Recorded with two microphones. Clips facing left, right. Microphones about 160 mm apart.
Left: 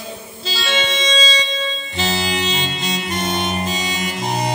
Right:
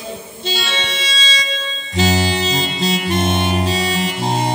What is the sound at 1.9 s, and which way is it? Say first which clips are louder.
Music: right 6 dB; 35° right (ahead or behind).